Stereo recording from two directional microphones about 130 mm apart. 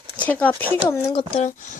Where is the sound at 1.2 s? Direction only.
60° left (ahead or behind).